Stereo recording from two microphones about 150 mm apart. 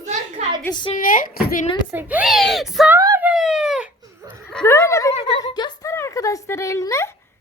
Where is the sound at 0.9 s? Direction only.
65° left (ahead or behind).